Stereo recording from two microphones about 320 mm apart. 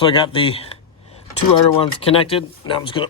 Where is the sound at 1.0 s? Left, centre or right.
Centre.